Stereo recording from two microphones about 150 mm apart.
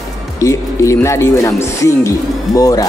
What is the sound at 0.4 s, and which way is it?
Speech, 20° left (ahead or behind).